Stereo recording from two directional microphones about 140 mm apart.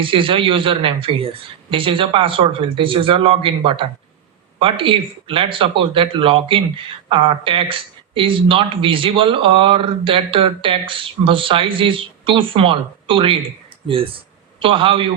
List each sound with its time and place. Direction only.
0.0 s speech: 40° right (ahead or behind)